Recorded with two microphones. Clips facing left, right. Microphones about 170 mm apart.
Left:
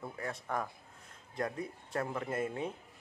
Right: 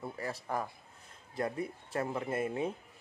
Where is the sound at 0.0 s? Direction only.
5° right (ahead or behind).